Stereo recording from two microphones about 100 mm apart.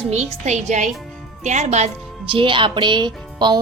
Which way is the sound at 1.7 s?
90° right.